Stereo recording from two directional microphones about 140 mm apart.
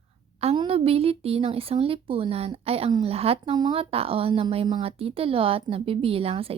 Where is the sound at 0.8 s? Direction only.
45° right (ahead or behind).